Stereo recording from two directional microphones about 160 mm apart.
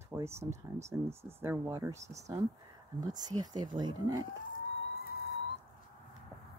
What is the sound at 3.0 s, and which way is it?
Speech, 25° right (ahead or behind).